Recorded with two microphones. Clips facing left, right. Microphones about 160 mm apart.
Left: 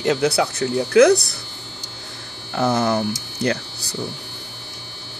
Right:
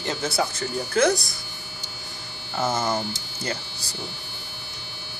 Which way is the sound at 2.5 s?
70° left (ahead or behind).